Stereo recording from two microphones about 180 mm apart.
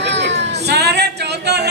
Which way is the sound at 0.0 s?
75° right (ahead or behind).